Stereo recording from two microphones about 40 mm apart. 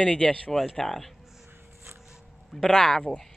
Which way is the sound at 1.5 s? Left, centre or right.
Right.